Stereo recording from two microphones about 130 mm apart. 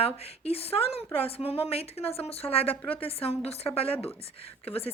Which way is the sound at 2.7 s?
15° left (ahead or behind).